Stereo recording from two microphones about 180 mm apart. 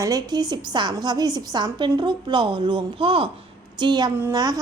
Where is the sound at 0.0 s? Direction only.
20° right (ahead or behind).